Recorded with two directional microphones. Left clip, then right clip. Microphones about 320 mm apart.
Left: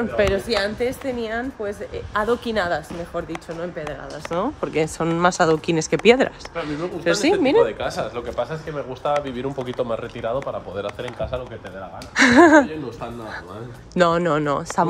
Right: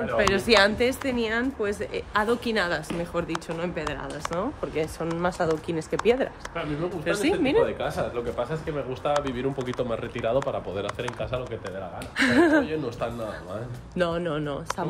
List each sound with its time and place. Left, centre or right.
0.3 s speech: centre
4.3 s speech: left
6.5 s speech: centre
7.6 s speech: left
13.9 s speech: left